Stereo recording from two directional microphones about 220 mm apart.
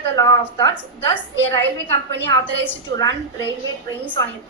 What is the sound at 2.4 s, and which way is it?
A woman's voice, 10° left (ahead or behind).